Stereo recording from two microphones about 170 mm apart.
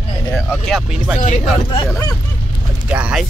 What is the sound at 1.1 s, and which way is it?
Speech, 45° left (ahead or behind).